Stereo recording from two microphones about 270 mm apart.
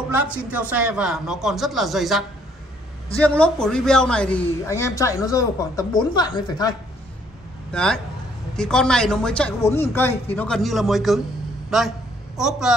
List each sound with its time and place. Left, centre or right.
0.5 s a man's voice: centre
7.7 s speech: centre